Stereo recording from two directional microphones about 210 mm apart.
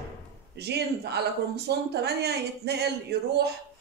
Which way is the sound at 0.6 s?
50° right (ahead or behind).